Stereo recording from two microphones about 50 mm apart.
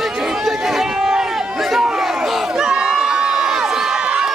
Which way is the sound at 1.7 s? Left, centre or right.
Centre.